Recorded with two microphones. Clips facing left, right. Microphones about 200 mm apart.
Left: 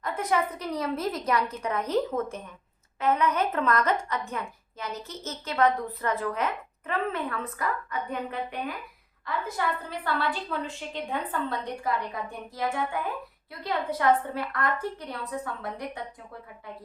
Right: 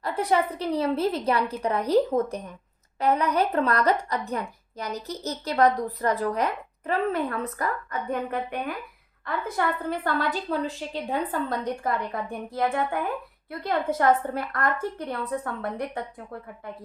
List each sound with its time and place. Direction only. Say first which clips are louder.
0.0 s a woman's voice: right 3 dB; 30° right (ahead or behind); by 16.0 s 55° right (ahead or behind)